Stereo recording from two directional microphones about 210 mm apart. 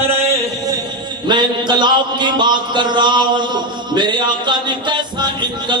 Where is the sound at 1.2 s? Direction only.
20° right (ahead or behind).